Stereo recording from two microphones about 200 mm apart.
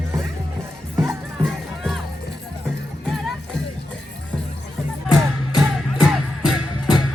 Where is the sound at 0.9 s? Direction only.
15° right (ahead or behind).